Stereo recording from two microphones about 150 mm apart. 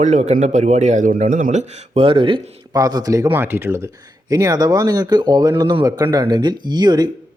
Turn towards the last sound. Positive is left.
turn(degrees=-30)  # may be behind; listen again after turning